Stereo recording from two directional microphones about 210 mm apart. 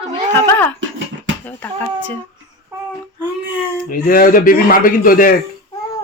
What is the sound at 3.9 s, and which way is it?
A man's voice, 40° left (ahead or behind).